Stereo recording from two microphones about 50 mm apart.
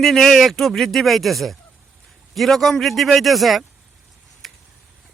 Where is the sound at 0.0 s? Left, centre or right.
Centre.